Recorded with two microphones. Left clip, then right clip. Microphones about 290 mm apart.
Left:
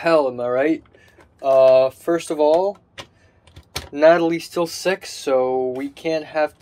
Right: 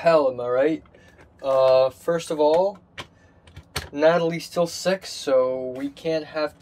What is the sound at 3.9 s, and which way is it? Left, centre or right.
Speech, centre.